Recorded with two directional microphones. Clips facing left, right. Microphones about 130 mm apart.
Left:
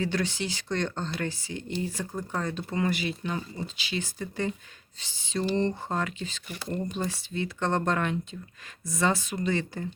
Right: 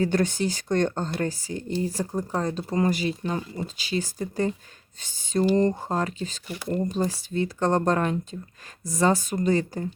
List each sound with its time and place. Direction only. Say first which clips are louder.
0.0 s speech: right 6 dB; 45° right (ahead or behind)